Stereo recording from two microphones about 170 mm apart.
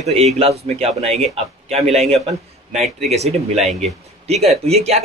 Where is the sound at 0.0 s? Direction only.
40° right (ahead or behind).